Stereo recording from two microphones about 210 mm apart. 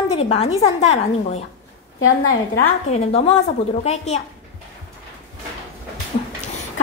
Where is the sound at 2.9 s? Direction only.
30° left (ahead or behind).